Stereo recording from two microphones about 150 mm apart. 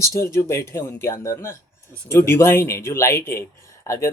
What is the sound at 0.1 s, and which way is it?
Speech, 20° left (ahead or behind).